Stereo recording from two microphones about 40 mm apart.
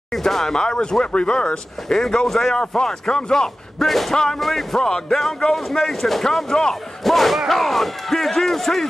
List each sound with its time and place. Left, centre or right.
0.1 s speech: centre
2.0 s speech: centre
2.5 s speech: centre
3.8 s speech: centre